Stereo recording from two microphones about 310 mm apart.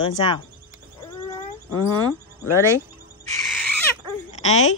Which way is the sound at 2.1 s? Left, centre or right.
Centre.